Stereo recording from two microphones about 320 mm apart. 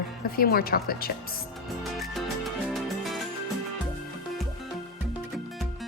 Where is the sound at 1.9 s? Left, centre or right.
Centre.